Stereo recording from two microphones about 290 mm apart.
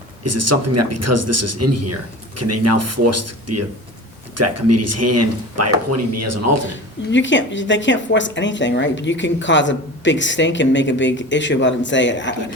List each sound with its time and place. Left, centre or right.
0.3 s speech: right
7.1 s a woman's voice: left